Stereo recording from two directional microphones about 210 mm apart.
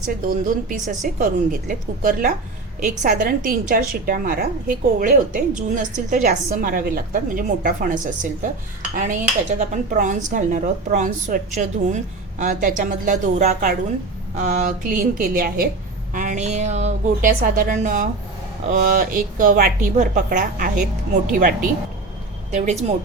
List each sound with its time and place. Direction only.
0.0 s a woman's voice: 40° right (ahead or behind)